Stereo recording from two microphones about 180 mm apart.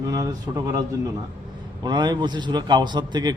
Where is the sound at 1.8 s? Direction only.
25° right (ahead or behind).